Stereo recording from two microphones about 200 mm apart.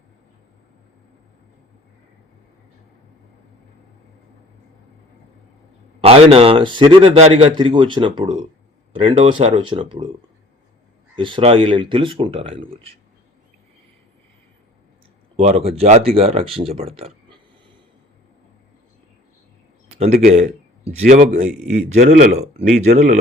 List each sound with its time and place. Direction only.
6.0 s a man's voice: 30° right (ahead or behind)
11.1 s a man's voice: 25° right (ahead or behind)
15.4 s a man's voice: 30° right (ahead or behind)
20.1 s a man's voice: 40° right (ahead or behind)